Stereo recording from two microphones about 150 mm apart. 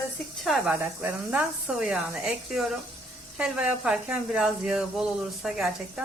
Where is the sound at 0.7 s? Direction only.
15° right (ahead or behind).